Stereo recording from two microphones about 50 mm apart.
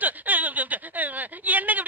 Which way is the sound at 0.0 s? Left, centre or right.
Right.